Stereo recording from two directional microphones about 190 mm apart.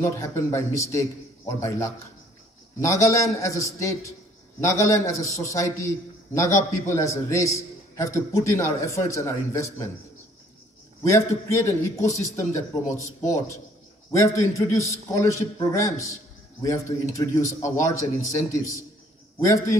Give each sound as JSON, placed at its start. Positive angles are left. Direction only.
{"t": 0.0, "sound": "a man's voice", "side_deg": 15}
{"t": 11.1, "sound": "a man's voice", "side_deg": 15}